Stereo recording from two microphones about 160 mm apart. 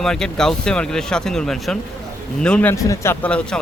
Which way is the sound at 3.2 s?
5° left (ahead or behind).